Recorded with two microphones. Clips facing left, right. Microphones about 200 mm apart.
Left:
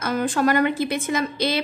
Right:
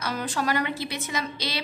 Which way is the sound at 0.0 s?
50° left (ahead or behind).